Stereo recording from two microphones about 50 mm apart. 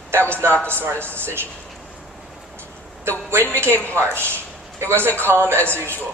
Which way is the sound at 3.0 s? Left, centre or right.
Right.